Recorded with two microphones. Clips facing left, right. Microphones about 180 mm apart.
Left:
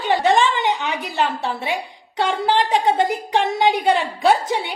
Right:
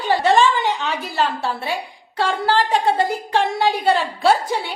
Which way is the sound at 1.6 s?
20° left (ahead or behind).